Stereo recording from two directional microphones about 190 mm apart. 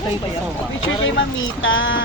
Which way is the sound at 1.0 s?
90° left.